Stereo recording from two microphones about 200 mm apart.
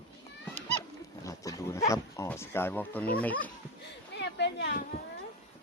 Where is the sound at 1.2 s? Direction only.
15° left (ahead or behind).